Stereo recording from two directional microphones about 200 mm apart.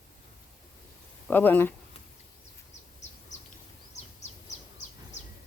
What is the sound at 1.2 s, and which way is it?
Speech, 10° left (ahead or behind).